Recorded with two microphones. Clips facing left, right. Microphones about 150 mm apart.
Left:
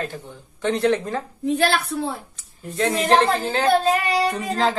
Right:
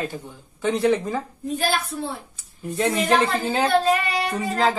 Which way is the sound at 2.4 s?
10° right (ahead or behind).